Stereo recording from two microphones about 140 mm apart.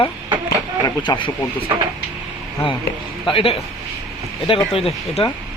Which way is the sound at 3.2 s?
40° left (ahead or behind).